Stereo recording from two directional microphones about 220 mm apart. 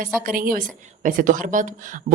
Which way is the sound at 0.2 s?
40° right (ahead or behind).